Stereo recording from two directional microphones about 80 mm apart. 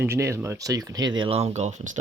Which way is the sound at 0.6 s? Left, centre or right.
Right.